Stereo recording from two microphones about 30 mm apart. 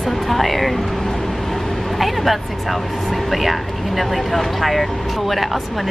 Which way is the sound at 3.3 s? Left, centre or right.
Centre.